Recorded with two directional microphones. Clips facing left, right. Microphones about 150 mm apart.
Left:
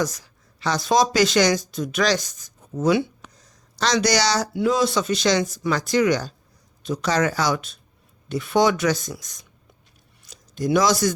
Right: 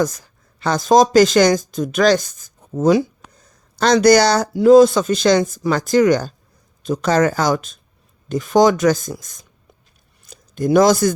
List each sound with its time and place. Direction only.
0.0 s speech: 50° right (ahead or behind)
3.4 s speech: 50° right (ahead or behind)
10.2 s a sound: 50° right (ahead or behind)